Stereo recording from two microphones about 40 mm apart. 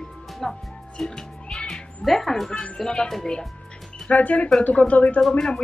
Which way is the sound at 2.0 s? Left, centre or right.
Centre.